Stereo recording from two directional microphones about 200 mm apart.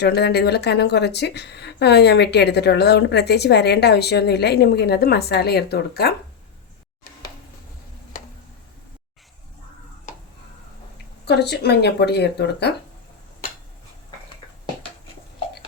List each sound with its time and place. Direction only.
0.0 s speech: 55° left (ahead or behind)
11.3 s speech: 55° left (ahead or behind)